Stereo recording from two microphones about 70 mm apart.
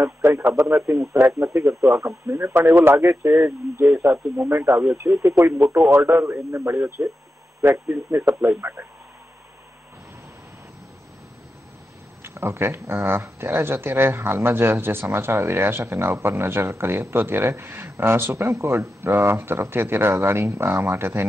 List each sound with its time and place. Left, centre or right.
0.0 s speech: right
2.3 s speech: right
4.4 s speech: right
12.2 s speech: right